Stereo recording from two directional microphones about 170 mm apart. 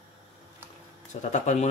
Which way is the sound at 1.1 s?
45° left (ahead or behind).